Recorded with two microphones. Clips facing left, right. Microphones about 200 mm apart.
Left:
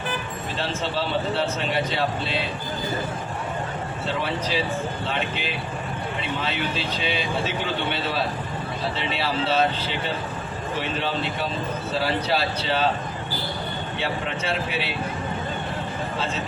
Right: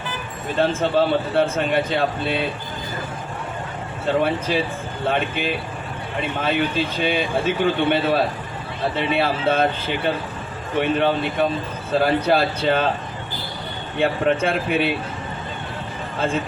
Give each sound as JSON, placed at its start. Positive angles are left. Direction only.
{"t": 0.6, "sound": "a man's voice", "side_deg": -50}
{"t": 4.2, "sound": "a man's voice", "side_deg": -50}
{"t": 14.0, "sound": "a man's voice", "side_deg": -50}
{"t": 16.1, "sound": "a man's voice", "side_deg": -50}